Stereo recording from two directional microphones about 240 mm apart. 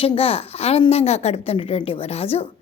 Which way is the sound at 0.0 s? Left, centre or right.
Left.